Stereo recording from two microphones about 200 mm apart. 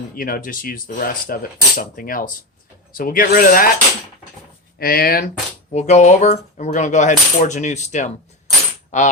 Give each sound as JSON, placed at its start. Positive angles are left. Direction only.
{"t": 0.2, "sound": "speech", "side_deg": 45}
{"t": 4.8, "sound": "speech", "side_deg": 50}
{"t": 5.7, "sound": "speech", "side_deg": 35}